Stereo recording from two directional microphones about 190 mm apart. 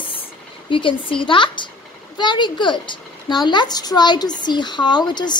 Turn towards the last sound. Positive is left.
turn(degrees=20)  # may be behind; listen again after turning